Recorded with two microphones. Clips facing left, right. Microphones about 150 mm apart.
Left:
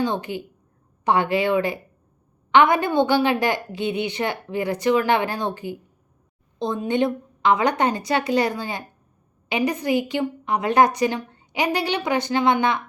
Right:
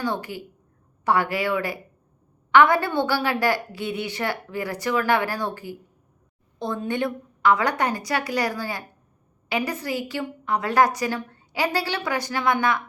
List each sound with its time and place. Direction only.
0.0 s a woman's voice: 20° left (ahead or behind)